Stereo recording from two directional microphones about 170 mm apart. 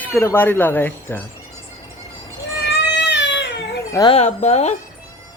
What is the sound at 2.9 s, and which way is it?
Baby cry, 90° left.